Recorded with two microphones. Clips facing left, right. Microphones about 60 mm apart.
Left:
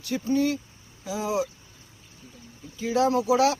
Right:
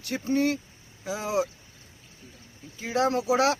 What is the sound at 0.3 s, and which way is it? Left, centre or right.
Speech, right.